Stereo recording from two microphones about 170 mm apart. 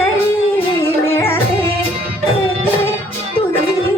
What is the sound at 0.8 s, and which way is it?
Music, 15° left (ahead or behind).